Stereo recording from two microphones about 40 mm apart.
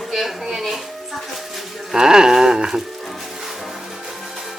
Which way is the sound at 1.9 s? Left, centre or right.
Centre.